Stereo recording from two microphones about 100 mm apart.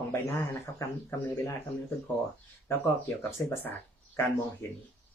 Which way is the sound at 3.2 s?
25° left (ahead or behind).